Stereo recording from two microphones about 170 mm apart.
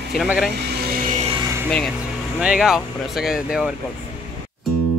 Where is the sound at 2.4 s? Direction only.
5° right (ahead or behind).